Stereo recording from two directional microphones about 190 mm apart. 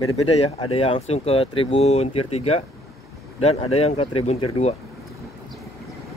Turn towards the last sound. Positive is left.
turn(degrees=35)  # may be behind; listen again after turning